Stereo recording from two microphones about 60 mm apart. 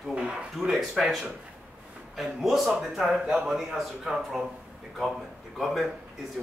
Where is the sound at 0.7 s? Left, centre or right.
Centre.